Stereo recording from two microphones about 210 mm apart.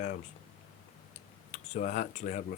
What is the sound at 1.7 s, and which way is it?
Speech, 40° left (ahead or behind).